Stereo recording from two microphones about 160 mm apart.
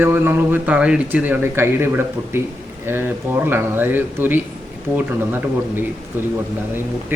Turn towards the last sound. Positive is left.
turn(degrees=-10)  # may be behind; listen again after turning